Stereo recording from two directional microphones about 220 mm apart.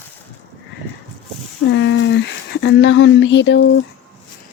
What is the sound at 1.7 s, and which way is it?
Speech, 55° left (ahead or behind).